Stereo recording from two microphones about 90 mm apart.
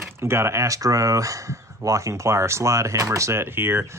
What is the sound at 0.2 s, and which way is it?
Speech, 30° right (ahead or behind).